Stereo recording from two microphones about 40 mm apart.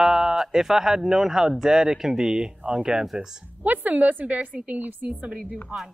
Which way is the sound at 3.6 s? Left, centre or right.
Right.